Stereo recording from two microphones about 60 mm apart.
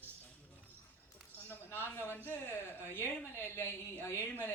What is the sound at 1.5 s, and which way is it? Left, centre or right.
A woman's voice, left.